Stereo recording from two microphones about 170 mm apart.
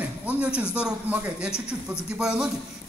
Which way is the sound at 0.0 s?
10° right (ahead or behind).